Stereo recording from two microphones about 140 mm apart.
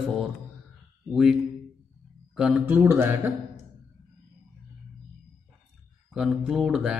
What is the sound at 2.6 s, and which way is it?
Speech, 15° right (ahead or behind).